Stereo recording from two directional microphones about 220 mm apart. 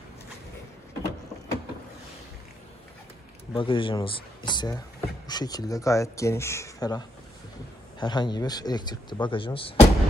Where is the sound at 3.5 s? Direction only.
25° left (ahead or behind).